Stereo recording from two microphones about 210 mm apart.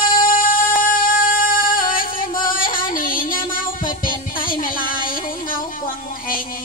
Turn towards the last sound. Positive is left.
turn(degrees=40)  # may be behind; listen again after turning